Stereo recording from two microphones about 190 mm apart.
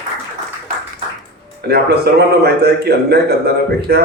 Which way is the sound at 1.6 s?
55° right (ahead or behind).